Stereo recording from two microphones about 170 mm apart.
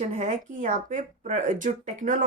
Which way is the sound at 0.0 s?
45° right (ahead or behind).